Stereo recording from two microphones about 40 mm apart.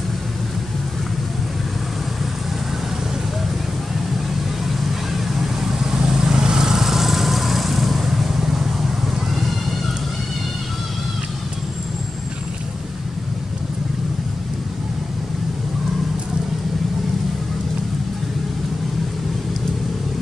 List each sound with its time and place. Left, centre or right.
5.9 s vehicle: centre